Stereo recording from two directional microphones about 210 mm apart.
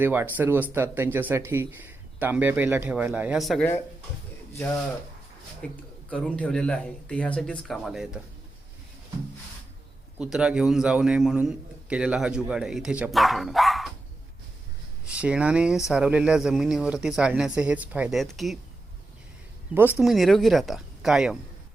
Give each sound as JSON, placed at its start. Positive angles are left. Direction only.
{"t": 0.0, "sound": "speech", "side_deg": -10}
{"t": 5.6, "sound": "a man's voice", "side_deg": 5}
{"t": 10.2, "sound": "a man's voice", "side_deg": -5}
{"t": 15.0, "sound": "a man's voice", "side_deg": -5}
{"t": 19.7, "sound": "a man's voice", "side_deg": -10}